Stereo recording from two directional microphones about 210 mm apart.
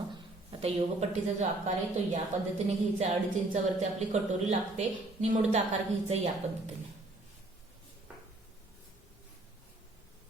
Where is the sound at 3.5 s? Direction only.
35° right (ahead or behind).